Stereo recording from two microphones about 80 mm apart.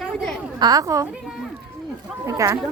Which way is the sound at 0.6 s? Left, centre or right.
Right.